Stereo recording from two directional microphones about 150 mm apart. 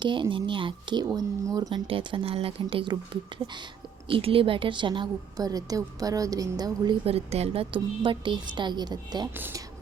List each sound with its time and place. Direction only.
0.0 s a woman's voice: 30° right (ahead or behind)
7.0 s speech: 40° right (ahead or behind)